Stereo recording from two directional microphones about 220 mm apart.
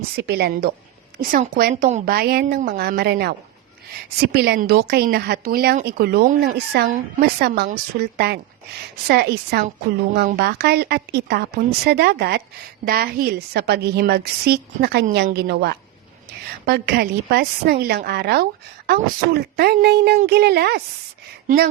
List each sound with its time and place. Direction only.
0.2 s a woman's voice: 45° right (ahead or behind)